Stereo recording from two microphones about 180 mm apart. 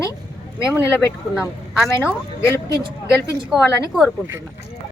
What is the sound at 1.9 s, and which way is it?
Speech, 15° left (ahead or behind).